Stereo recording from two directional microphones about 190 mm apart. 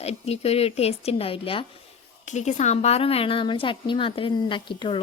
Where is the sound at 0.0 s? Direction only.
35° left (ahead or behind).